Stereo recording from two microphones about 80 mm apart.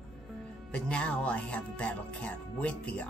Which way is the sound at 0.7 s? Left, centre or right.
Centre.